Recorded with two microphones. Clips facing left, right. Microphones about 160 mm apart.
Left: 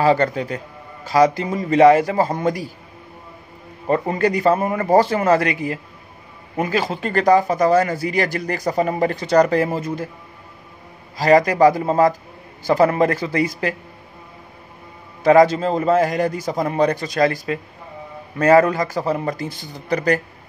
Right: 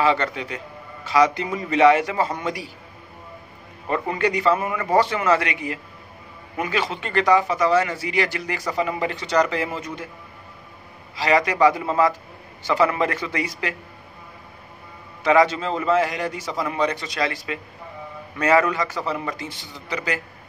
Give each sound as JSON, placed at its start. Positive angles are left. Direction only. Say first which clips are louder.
{"t": 0.0, "sound": "a man's voice", "louder": "left 5 dB", "side_deg": 40}
{"t": 3.8, "sound": "a man's voice", "louder": "left 4 dB", "side_deg": 35}
{"t": 11.1, "sound": "a man's voice", "louder": "left 5 dB", "side_deg": 40}
{"t": 15.2, "sound": "a man's voice", "louder": "left 5 dB", "side_deg": 40}